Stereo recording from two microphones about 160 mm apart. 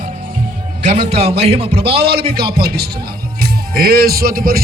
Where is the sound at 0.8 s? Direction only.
45° right (ahead or behind).